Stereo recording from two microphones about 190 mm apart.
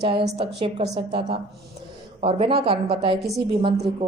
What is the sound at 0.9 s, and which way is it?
A woman's voice, 25° right (ahead or behind).